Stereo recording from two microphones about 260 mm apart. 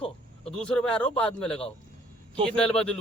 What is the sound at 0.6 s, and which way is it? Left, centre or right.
Speech, centre.